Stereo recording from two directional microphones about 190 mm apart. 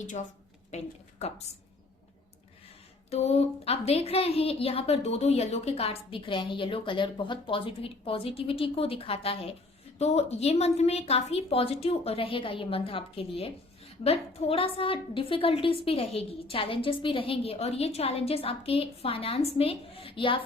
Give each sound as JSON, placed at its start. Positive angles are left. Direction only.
{"t": 0.7, "sound": "a woman's voice", "side_deg": 35}
{"t": 3.1, "sound": "a woman's voice", "side_deg": 35}